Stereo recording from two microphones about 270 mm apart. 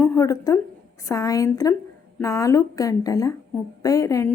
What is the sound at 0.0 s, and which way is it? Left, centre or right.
A woman's voice, centre.